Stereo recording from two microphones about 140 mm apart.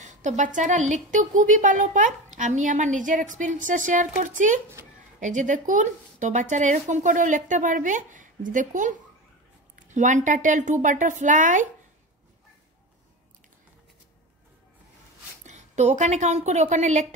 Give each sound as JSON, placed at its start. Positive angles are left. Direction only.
{"t": 0.0, "sound": "a woman's voice", "side_deg": -55}
{"t": 15.4, "sound": "a woman's voice", "side_deg": -55}